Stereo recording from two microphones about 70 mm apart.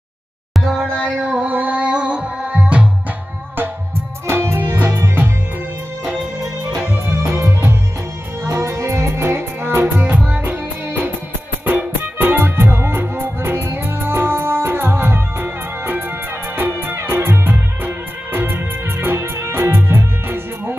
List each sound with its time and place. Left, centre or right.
1.2 s music: centre
4.3 s music: right
7.2 s music: right